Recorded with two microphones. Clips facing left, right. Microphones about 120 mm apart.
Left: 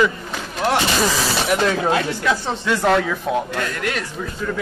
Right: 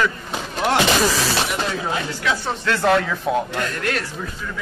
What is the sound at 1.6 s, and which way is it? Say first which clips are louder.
Speech: left 6 dB; 65° left (ahead or behind).